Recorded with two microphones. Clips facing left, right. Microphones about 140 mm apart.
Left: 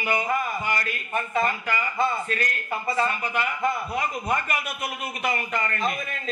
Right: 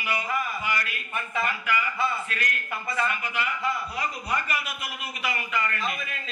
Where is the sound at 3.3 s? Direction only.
45° left (ahead or behind).